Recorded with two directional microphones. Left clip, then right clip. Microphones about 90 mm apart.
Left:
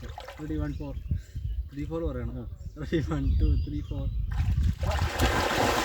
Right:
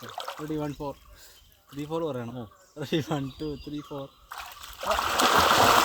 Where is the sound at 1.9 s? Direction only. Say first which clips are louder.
Right 3 dB; 5° left (ahead or behind).